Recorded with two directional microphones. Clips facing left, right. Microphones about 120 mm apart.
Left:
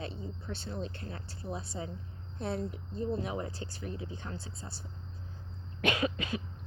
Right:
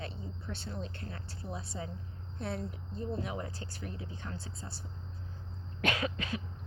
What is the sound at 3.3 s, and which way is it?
Speech, 25° left (ahead or behind).